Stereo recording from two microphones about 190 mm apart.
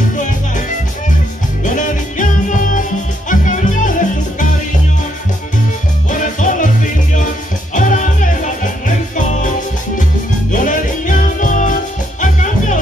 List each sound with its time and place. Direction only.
1.6 s music: 40° left (ahead or behind)
6.0 s music: 45° left (ahead or behind)
10.5 s music: 45° left (ahead or behind)